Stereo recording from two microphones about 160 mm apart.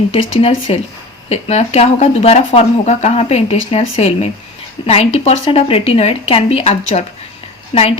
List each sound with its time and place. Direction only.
0.1 s speech: 40° left (ahead or behind)